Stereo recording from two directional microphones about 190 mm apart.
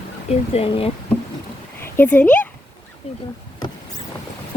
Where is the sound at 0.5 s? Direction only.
30° left (ahead or behind).